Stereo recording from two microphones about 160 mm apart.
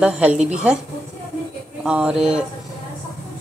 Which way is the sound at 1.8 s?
5° right (ahead or behind).